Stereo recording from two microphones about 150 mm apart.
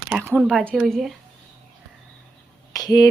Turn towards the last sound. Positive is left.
turn(degrees=25)  # may be behind; listen again after turning